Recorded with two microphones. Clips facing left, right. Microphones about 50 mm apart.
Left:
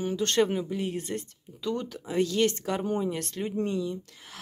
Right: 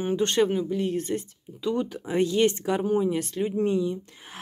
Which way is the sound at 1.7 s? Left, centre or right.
Centre.